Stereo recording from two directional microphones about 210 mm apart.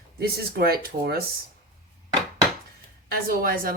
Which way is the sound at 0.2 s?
45° right (ahead or behind).